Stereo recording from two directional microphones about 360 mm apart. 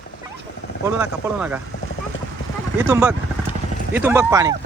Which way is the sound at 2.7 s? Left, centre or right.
Centre.